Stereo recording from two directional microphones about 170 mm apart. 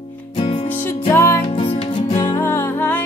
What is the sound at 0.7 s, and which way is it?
Music, 10° left (ahead or behind).